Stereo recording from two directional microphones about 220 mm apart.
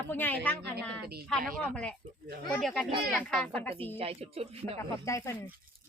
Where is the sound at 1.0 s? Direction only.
45° right (ahead or behind).